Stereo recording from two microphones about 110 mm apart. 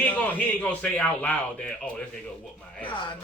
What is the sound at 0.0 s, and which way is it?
A man's voice, 10° left (ahead or behind).